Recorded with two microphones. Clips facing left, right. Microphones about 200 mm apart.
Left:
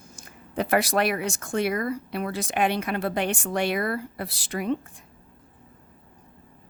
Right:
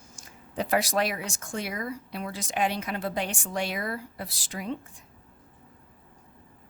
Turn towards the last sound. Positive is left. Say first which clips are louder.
# left 7 dB
turn(degrees=60)  # may be behind; listen again after turning